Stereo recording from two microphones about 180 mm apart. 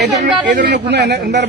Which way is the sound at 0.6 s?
65° right (ahead or behind).